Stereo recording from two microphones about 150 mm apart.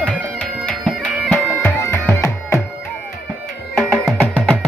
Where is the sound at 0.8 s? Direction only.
Centre (ahead or behind).